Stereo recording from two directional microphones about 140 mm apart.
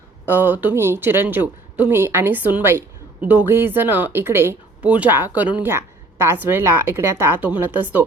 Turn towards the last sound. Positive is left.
turn(degrees=-15)  # may be behind; listen again after turning